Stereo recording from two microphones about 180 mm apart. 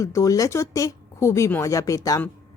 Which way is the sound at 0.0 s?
15° left (ahead or behind).